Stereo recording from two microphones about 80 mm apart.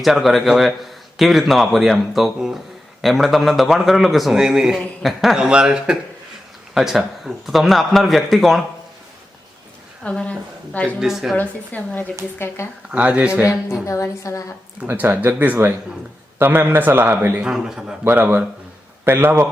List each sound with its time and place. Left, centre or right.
0.0 s a man's voice: centre
10.0 s a woman's voice: centre
11.0 s a man's voice: centre
11.3 s a woman's voice: centre
12.9 s speech: centre
13.8 s a woman's voice: left
14.8 s a man's voice: right
17.4 s speech: centre
18.0 s a man's voice: right